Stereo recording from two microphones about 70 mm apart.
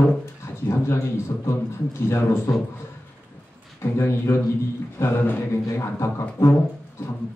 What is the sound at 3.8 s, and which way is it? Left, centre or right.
A man's voice, left.